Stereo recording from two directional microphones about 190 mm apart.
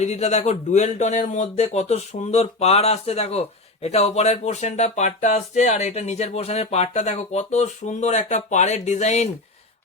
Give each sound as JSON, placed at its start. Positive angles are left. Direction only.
{"t": 0.0, "sound": "speech", "side_deg": 35}